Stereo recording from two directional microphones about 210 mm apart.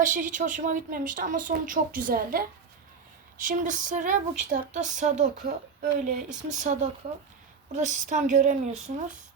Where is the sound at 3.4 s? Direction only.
40° right (ahead or behind).